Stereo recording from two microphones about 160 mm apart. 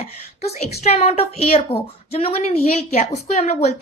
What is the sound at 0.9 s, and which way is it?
A woman's voice, 40° left (ahead or behind).